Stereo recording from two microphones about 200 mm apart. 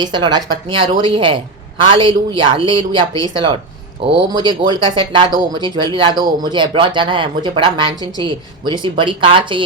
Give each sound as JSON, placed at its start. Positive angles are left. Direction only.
{"t": 0.0, "sound": "speech", "side_deg": -20}